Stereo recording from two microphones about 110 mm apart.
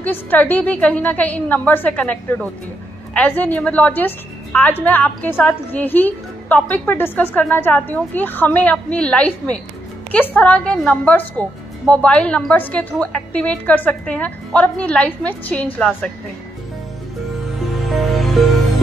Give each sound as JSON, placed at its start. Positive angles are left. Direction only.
{"t": 0.0, "sound": "a woman's voice", "side_deg": 15}
{"t": 17.8, "sound": "music", "side_deg": 0}